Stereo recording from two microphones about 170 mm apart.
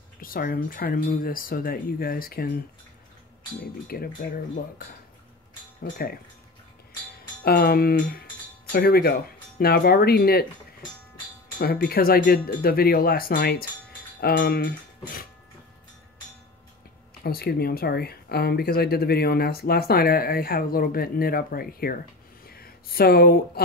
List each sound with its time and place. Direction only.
0.2 s speech: 55° left (ahead or behind)
3.8 s speech: 60° left (ahead or behind)
7.4 s speech: 65° left (ahead or behind)
11.5 s speech: 60° left (ahead or behind)
17.2 s speech: 65° left (ahead or behind)